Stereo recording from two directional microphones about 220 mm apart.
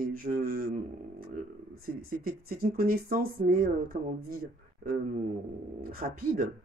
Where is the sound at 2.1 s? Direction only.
40° right (ahead or behind).